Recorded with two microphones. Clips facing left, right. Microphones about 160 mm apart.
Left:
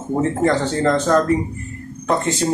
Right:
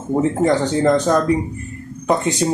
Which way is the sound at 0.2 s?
15° right (ahead or behind).